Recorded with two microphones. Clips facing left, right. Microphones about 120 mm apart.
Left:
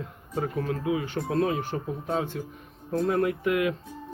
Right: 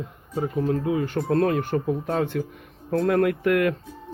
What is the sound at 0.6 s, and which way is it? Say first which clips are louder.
Speech: right 4 dB; 40° right (ahead or behind).